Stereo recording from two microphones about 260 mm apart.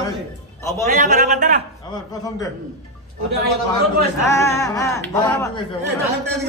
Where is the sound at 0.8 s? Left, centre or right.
Right.